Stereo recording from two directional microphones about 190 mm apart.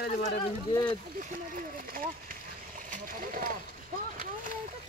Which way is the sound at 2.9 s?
45° right (ahead or behind).